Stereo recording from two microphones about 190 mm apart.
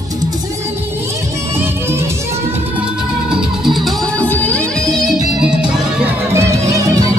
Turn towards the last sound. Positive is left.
turn(degrees=-15)  # may be behind; listen again after turning